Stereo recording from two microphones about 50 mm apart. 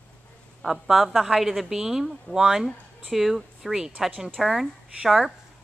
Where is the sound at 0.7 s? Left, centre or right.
Centre.